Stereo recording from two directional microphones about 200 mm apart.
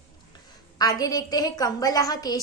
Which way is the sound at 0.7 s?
20° left (ahead or behind).